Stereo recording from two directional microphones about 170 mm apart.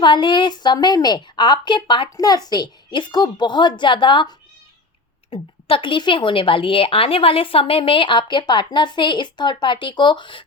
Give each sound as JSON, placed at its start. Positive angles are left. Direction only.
{"t": 0.0, "sound": "a woman's voice", "side_deg": 30}